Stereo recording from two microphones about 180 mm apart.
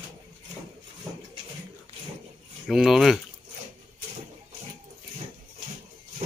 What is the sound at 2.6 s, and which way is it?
Speech, 5° right (ahead or behind).